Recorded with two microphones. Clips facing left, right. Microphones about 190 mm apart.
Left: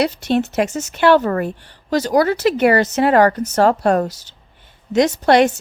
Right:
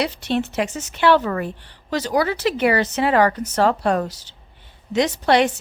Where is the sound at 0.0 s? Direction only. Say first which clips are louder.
Left 5 dB; 45° left (ahead or behind).